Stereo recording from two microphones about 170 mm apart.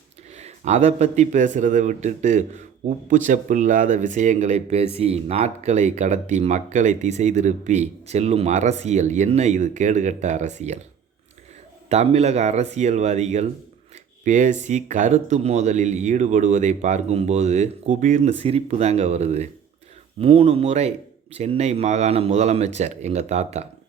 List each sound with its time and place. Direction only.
0.3 s speech: 40° right (ahead or behind)
11.9 s speech: 40° right (ahead or behind)